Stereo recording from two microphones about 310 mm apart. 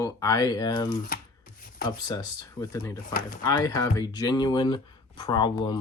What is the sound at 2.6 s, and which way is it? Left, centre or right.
Speech, centre.